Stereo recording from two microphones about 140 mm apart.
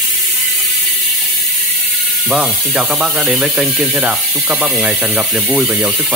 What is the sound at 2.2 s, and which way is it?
Speech, 5° right (ahead or behind).